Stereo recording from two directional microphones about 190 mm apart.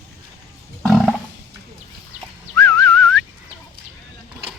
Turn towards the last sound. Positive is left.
turn(degrees=5)  # may be behind; listen again after turning